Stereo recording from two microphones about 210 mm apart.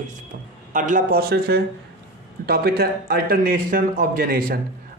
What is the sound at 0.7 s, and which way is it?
A man's voice, 40° right (ahead or behind).